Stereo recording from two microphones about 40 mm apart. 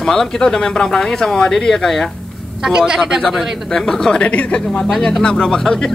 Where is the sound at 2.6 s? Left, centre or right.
Centre.